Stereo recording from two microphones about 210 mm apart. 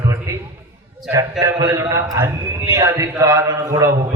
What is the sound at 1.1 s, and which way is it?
A man's voice, 15° right (ahead or behind).